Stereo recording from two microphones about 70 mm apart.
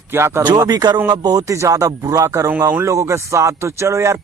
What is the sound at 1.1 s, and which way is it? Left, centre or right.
Speech, right.